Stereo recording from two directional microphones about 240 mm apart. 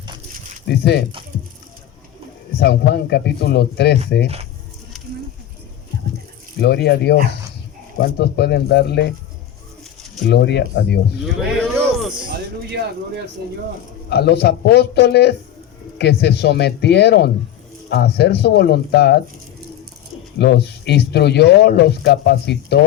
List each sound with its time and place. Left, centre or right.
0.7 s speech: left
2.6 s speech: left
6.6 s speech: left
10.2 s speech: left
11.8 s a sound: centre
14.1 s speech: left
20.4 s speech: left